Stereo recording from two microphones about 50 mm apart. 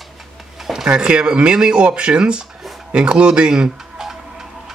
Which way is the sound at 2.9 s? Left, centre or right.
Right.